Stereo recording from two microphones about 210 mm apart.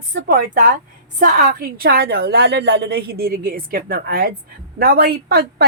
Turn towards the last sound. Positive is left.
turn(degrees=-50)  # may be behind; listen again after turning